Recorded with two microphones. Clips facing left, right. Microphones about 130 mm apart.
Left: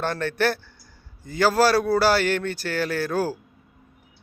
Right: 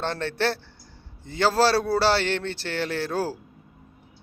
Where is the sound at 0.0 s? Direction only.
25° right (ahead or behind).